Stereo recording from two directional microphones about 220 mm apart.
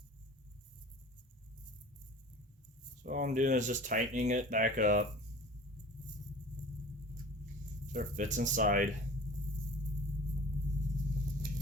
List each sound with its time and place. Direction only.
3.0 s speech: 35° right (ahead or behind)
7.9 s speech: 35° right (ahead or behind)